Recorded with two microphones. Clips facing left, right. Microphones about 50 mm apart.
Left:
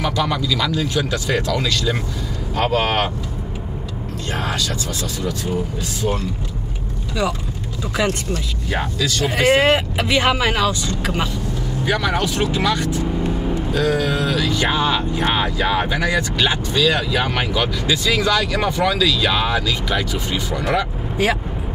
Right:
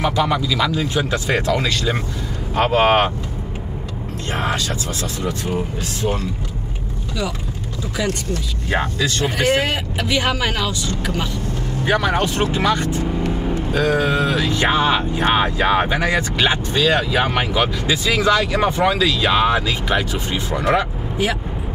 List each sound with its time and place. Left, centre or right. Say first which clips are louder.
0.0 s speech: right 2 dB; centre
4.3 s speech: right 2 dB; right
8.6 s speech: right 2 dB; right
9.5 s speech: left 4 dB; left
10.1 s speech: left 3 dB; centre
11.8 s speech: right 2 dB; right